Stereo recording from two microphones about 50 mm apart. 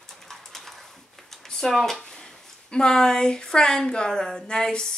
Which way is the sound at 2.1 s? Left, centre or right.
Centre.